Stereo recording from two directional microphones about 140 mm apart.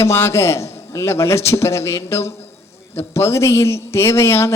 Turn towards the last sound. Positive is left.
turn(degrees=20)  # may be behind; listen again after turning